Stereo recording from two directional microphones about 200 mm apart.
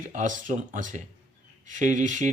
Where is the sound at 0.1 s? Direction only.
40° right (ahead or behind).